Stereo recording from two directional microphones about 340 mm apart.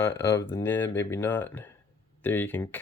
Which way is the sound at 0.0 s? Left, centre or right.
Centre.